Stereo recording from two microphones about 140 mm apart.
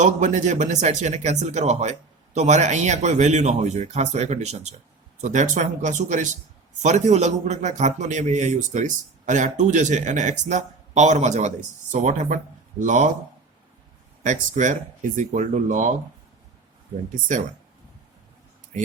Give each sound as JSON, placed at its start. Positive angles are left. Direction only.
{"t": 0.0, "sound": "a man's voice", "side_deg": -60}
{"t": 14.3, "sound": "a man's voice", "side_deg": -65}